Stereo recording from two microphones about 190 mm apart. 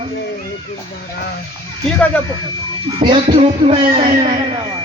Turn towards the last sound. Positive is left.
turn(degrees=-30)  # may be behind; listen again after turning